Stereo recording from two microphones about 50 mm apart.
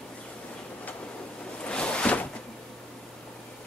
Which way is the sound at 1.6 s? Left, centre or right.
Left.